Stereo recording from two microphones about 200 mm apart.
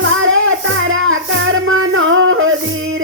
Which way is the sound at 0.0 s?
80° right.